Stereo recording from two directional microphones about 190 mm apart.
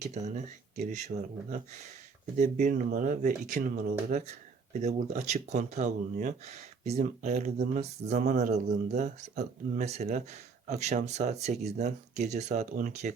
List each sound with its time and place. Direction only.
0.1 s speech: 40° right (ahead or behind)